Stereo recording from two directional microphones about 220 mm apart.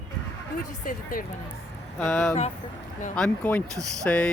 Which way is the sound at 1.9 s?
5° left (ahead or behind).